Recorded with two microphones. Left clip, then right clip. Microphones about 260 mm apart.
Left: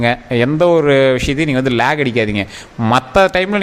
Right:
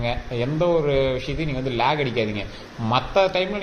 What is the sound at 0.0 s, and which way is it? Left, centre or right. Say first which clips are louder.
A man's voice: left 11 dB; left.